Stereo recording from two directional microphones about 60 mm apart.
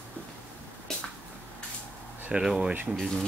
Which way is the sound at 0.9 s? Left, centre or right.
Centre.